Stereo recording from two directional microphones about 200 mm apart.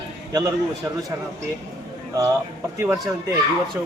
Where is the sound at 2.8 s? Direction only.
Centre (ahead or behind).